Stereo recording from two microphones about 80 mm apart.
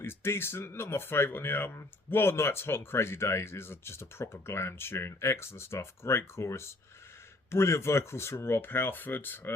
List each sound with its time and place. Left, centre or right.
0.0 s speech: left